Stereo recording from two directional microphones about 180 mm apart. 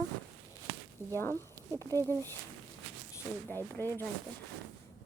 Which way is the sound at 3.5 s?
10° left (ahead or behind).